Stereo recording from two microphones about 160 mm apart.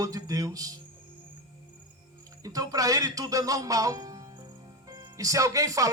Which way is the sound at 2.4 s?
20° right (ahead or behind).